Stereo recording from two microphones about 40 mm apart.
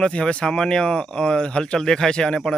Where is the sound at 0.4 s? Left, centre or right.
Centre.